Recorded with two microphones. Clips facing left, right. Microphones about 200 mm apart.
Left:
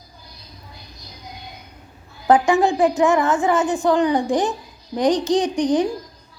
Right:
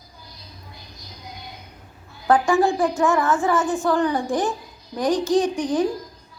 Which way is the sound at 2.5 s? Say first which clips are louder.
Left 2 dB; 20° left (ahead or behind).